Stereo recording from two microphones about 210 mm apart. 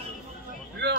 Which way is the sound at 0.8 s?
55° right (ahead or behind).